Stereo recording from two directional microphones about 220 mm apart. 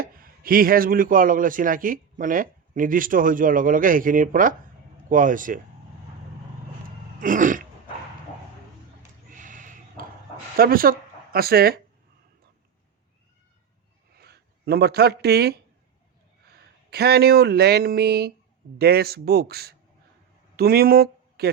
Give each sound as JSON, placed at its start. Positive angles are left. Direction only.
{"t": 0.0, "sound": "a man's voice", "side_deg": -40}
{"t": 7.2, "sound": "throat clearing", "side_deg": -35}
{"t": 9.3, "sound": "a sound", "side_deg": -35}
{"t": 10.6, "sound": "speech", "side_deg": -40}
{"t": 14.2, "sound": "speech", "side_deg": -45}
{"t": 16.6, "sound": "speech", "side_deg": -45}